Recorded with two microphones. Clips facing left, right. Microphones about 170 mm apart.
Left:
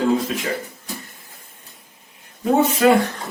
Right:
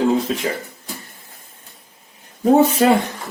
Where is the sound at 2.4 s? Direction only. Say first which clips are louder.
Right 4 dB; 35° right (ahead or behind).